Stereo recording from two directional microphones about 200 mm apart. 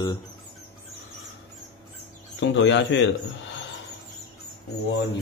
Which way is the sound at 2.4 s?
65° left (ahead or behind).